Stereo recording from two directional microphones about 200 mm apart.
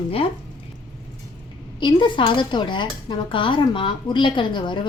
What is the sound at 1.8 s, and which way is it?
Speech, 25° left (ahead or behind).